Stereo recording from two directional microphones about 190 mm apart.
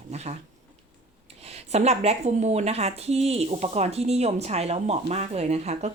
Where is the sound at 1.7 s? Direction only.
35° right (ahead or behind).